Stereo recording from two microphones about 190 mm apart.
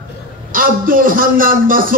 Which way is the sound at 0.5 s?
45° right (ahead or behind).